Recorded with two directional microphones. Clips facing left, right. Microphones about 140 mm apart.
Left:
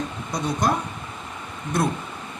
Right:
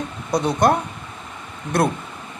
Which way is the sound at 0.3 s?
65° right (ahead or behind).